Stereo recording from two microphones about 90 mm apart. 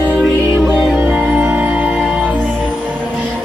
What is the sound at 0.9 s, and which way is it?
Music, 15° right (ahead or behind).